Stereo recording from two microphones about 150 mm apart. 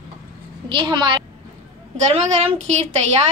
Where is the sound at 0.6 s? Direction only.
35° right (ahead or behind).